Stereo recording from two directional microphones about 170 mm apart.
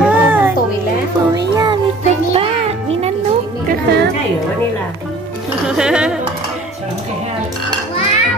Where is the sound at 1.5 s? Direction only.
25° right (ahead or behind).